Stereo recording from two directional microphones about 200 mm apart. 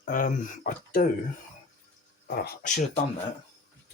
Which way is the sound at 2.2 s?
50° left (ahead or behind).